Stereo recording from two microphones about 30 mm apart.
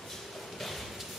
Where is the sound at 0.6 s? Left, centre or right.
Centre.